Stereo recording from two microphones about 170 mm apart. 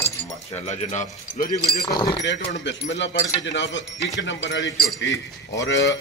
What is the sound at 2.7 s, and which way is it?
Speech, 90° left.